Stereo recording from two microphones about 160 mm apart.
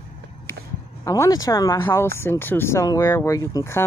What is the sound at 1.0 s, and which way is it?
Speech, 20° left (ahead or behind).